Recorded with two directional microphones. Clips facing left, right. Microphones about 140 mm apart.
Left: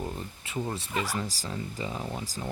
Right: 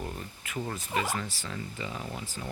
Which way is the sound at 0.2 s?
30° left (ahead or behind).